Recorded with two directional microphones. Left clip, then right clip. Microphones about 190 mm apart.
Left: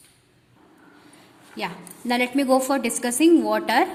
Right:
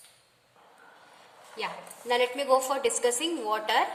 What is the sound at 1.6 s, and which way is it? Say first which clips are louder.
A woman's voice: left 4 dB; 45° left (ahead or behind).